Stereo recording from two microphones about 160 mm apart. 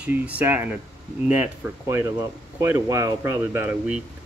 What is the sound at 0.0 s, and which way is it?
Speech, 10° right (ahead or behind).